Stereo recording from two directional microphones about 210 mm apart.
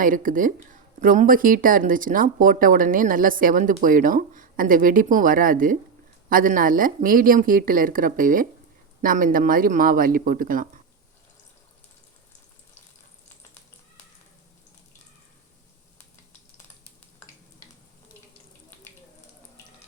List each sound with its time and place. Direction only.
0.0 s speech: 40° right (ahead or behind)